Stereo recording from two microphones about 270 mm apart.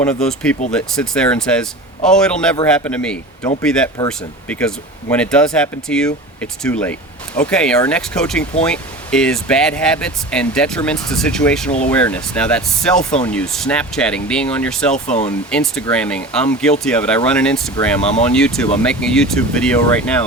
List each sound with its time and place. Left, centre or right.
0.0 s speech: centre
14.9 s speech: left
15.4 s speech: centre